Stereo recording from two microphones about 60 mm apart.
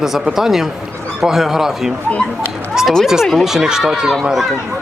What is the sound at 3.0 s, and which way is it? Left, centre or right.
Speech, centre.